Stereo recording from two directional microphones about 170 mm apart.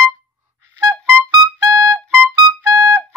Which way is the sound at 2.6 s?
15° right (ahead or behind).